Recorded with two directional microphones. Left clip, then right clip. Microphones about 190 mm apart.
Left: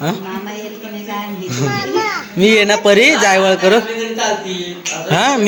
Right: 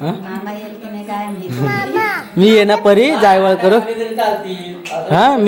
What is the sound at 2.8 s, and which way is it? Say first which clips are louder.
Speech: even; 5° right (ahead or behind).